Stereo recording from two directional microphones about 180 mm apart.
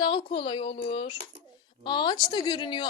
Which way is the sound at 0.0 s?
25° left (ahead or behind).